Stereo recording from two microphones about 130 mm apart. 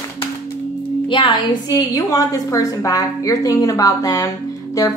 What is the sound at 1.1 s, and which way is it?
A woman's voice, 40° left (ahead or behind).